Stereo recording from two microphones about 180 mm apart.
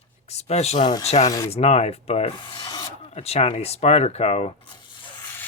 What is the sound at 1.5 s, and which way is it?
Speech, 35° left (ahead or behind).